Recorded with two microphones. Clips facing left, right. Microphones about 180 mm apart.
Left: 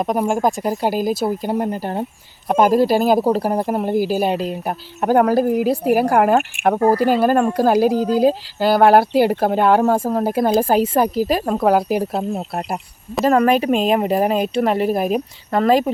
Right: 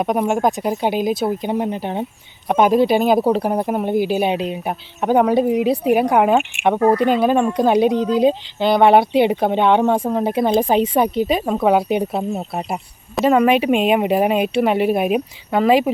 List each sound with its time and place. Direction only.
0.0 s speech: centre (ahead or behind)
6.7 s speech: 30° left (ahead or behind)
7.0 s speech: 5° left (ahead or behind)